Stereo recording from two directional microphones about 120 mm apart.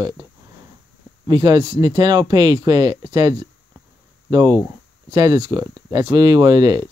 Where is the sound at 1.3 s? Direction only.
35° right (ahead or behind).